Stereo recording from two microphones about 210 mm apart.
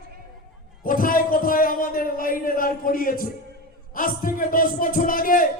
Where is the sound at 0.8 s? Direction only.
40° left (ahead or behind).